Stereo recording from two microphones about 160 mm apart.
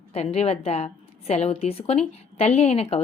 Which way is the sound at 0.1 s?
40° left (ahead or behind).